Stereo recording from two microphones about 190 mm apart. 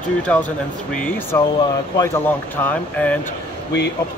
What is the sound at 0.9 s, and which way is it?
Speech, 10° left (ahead or behind).